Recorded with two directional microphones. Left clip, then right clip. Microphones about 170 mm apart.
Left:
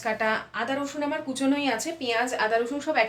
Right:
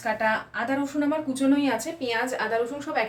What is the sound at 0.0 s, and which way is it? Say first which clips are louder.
A woman's voice: right 1 dB; 5° left (ahead or behind).